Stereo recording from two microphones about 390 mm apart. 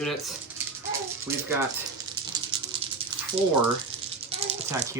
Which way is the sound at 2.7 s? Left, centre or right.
Centre.